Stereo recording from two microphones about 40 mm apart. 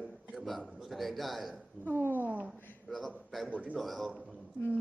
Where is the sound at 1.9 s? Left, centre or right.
Right.